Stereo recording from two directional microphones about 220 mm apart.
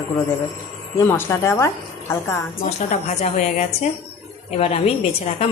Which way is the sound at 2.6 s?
30° left (ahead or behind).